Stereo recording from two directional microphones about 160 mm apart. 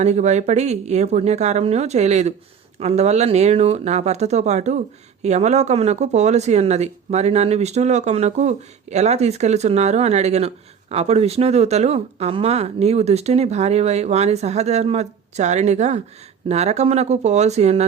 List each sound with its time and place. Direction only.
0.0 s speech: 45° right (ahead or behind)